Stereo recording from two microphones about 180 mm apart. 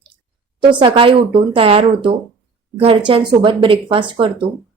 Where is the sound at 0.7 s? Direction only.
30° right (ahead or behind).